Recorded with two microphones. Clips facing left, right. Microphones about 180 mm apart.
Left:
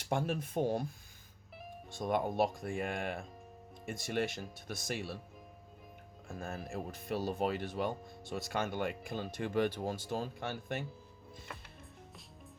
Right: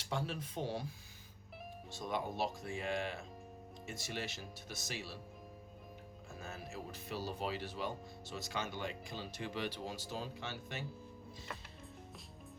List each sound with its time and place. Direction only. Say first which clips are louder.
0.0 s speech: left 6 dB; 50° left (ahead or behind)
1.9 s speech: left 6 dB; 50° left (ahead or behind)
6.2 s speech: left 6 dB; 50° left (ahead or behind)